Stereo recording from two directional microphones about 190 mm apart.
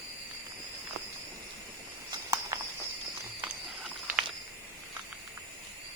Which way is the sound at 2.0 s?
20° right (ahead or behind).